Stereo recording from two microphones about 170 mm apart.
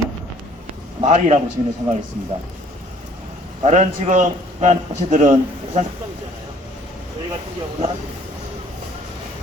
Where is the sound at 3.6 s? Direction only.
40° right (ahead or behind).